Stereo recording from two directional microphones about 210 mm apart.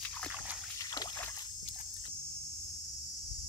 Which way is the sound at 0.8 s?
20° left (ahead or behind).